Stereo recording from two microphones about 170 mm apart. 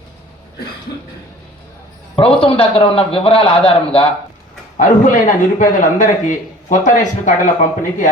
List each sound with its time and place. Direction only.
2.1 s a man's voice: 30° left (ahead or behind)
4.8 s a man's voice: 50° left (ahead or behind)